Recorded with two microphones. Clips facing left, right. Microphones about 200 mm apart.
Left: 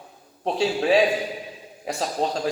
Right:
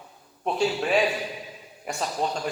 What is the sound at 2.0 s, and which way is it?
Speech, 35° left (ahead or behind).